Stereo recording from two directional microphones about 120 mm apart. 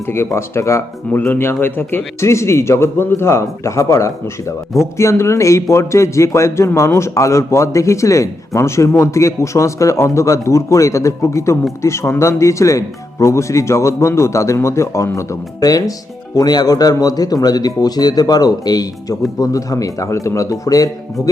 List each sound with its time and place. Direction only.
0.1 s a man's voice: 20° left (ahead or behind)